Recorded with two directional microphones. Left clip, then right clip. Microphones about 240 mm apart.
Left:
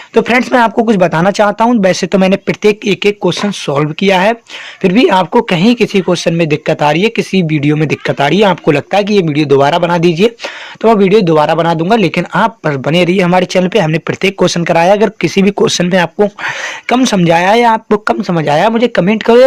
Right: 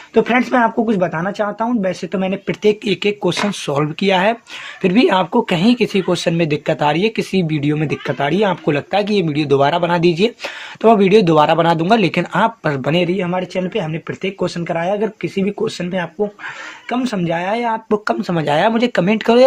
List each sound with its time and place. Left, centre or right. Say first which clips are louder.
0.1 s speech: left 5 dB; left
2.5 s speech: left 5 dB; left